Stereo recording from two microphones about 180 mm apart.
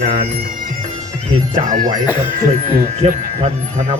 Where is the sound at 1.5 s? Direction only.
45° right (ahead or behind).